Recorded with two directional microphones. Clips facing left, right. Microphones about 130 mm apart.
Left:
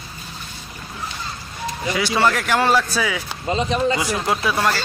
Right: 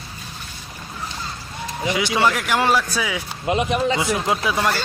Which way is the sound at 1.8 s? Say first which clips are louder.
Even; 15° right (ahead or behind).